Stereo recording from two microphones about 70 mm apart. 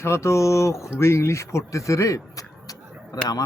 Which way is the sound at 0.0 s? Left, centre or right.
Left.